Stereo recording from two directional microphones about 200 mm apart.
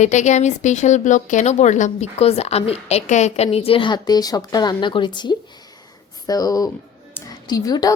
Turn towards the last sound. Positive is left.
turn(degrees=20)  # may be behind; listen again after turning